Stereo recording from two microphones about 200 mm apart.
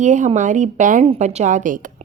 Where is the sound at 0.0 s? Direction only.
40° right (ahead or behind).